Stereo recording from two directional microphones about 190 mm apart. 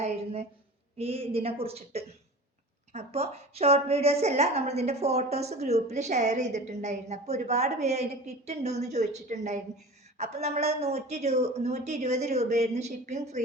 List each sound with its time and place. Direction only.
0.9 s a woman's voice: 30° right (ahead or behind)